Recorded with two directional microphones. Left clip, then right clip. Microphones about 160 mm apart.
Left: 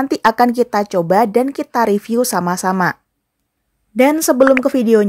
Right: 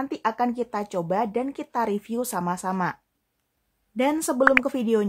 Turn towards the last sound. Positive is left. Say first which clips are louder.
# left 9 dB
turn(degrees=30)  # may be behind; listen again after turning